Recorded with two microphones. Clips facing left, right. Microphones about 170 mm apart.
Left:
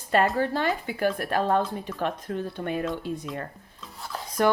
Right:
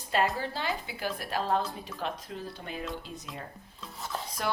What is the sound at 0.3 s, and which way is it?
Speech, 55° left (ahead or behind).